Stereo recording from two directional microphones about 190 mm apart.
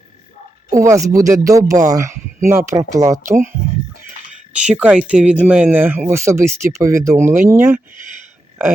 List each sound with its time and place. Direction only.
0.7 s speech: 15° right (ahead or behind)
4.5 s speech: 5° right (ahead or behind)